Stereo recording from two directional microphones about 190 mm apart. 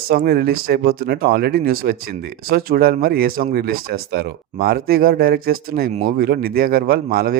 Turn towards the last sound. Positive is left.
turn(degrees=-50)  # may be behind; listen again after turning